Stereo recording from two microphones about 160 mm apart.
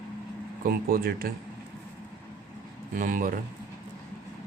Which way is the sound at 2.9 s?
55° right (ahead or behind).